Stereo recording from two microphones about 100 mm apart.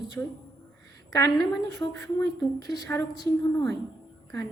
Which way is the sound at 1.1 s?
40° left (ahead or behind).